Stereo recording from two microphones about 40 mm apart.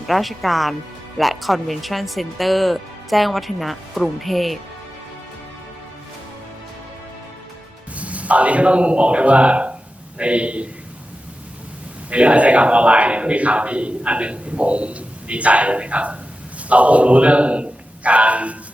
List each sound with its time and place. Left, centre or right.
0.1 s speech: centre
7.9 s a man's voice: right
12.1 s a man's voice: right